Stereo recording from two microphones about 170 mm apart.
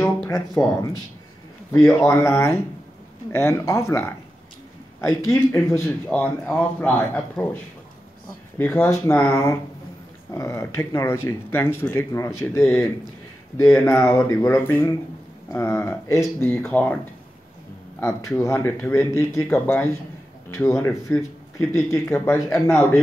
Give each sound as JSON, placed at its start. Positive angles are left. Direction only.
{"t": 0.0, "sound": "speech", "side_deg": 10}
{"t": 1.7, "sound": "speech", "side_deg": 15}
{"t": 8.5, "sound": "speech", "side_deg": 15}
{"t": 18.4, "sound": "speech", "side_deg": 15}